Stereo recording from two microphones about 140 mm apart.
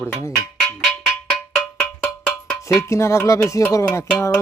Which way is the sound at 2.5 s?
20° left (ahead or behind).